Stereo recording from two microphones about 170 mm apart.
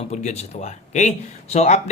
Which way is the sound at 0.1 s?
40° left (ahead or behind).